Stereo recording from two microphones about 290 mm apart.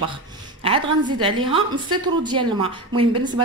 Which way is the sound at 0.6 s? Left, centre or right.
Centre.